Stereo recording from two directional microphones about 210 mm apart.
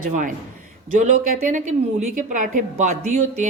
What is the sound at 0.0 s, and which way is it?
A woman's voice, 40° right (ahead or behind).